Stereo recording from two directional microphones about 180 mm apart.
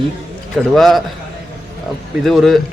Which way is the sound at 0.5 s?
Centre (ahead or behind).